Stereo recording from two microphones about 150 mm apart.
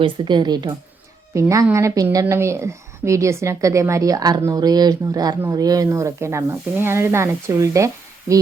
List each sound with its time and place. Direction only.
0.0 s a woman's voice: 30° right (ahead or behind)